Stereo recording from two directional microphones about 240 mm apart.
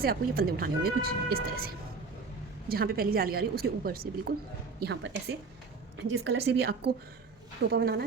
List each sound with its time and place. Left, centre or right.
0.0 s a woman's voice: right